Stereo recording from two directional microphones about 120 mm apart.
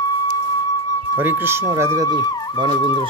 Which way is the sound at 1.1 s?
20° right (ahead or behind).